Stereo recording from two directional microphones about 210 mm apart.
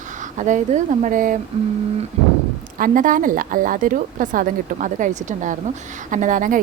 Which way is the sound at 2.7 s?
40° right (ahead or behind).